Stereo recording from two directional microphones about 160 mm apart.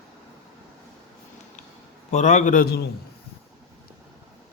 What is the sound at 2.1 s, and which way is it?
Speech, 50° left (ahead or behind).